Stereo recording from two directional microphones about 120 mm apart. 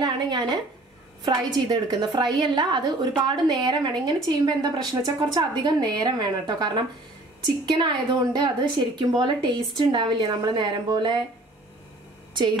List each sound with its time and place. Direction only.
0.0 s a woman's voice: 35° right (ahead or behind)